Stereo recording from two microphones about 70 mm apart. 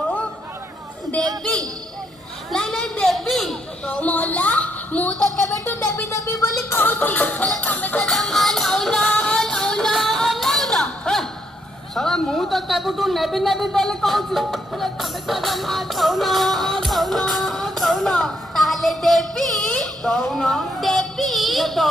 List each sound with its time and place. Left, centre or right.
2.5 s a sound: centre
3.8 s a sound: centre
6.0 s speech: left
6.7 s speech: left
8.0 s music: centre
11.9 s a man's voice: centre